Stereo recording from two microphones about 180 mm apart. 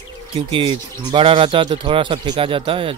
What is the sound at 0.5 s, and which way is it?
Speech, 25° right (ahead or behind).